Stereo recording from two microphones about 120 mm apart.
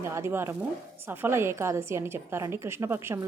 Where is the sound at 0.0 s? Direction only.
20° right (ahead or behind).